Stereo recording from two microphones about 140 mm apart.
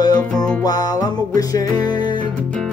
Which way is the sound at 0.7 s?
25° left (ahead or behind).